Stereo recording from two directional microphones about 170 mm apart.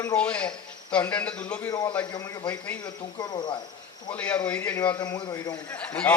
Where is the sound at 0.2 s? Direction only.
5° left (ahead or behind).